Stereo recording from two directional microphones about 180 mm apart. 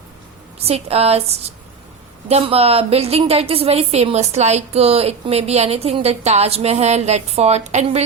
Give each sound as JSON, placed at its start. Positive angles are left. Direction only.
{"t": 0.6, "sound": "a woman's voice", "side_deg": -35}
{"t": 2.2, "sound": "a woman's voice", "side_deg": -35}